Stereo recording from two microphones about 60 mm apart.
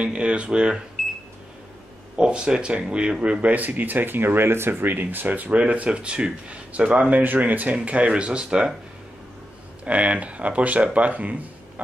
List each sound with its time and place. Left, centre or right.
0.0 s speech: centre
2.1 s speech: centre
9.8 s speech: right